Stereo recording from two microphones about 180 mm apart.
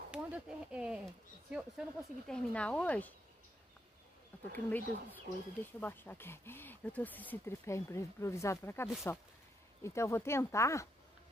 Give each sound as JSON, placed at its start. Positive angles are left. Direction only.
{"t": 0.1, "sound": "speech", "side_deg": -5}
{"t": 4.6, "sound": "speech", "side_deg": 10}